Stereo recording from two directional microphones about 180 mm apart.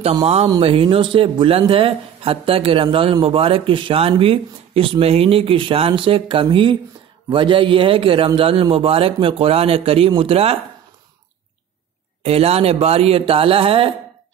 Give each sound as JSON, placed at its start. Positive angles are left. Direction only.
{"t": 0.0, "sound": "speech", "side_deg": -35}
{"t": 12.2, "sound": "speech", "side_deg": -35}